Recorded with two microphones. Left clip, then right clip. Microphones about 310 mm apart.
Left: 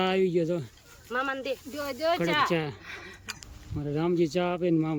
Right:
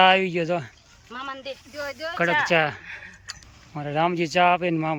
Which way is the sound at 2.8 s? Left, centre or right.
Left.